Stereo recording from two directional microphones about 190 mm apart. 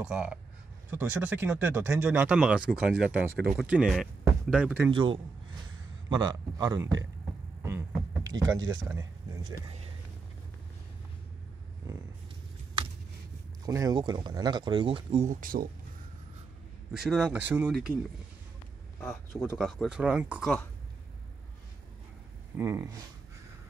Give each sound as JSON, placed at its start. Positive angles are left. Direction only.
{"t": 0.0, "sound": "speech", "side_deg": -5}
{"t": 4.9, "sound": "speech", "side_deg": -25}
{"t": 7.6, "sound": "a sound", "side_deg": -15}
{"t": 8.8, "sound": "speech", "side_deg": -15}
{"t": 13.7, "sound": "speech", "side_deg": -20}
{"t": 15.4, "sound": "speech", "side_deg": -50}
{"t": 16.9, "sound": "speech", "side_deg": -5}
{"t": 18.9, "sound": "speech", "side_deg": 10}
{"t": 19.6, "sound": "speech", "side_deg": 0}
{"t": 22.6, "sound": "speech", "side_deg": -15}